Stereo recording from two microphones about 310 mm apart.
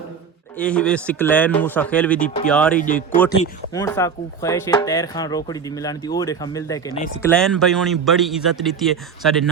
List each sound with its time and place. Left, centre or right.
0.5 s speech: centre
2.7 s speech: left; by 9.5 s centre